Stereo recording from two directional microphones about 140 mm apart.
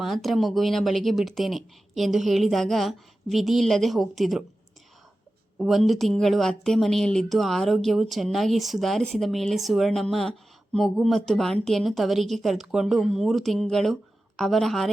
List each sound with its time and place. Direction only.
0.0 s speech: centre (ahead or behind)
5.5 s speech: centre (ahead or behind)